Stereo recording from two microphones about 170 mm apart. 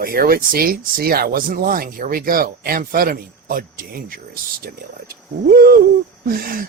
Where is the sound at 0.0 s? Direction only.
60° right (ahead or behind).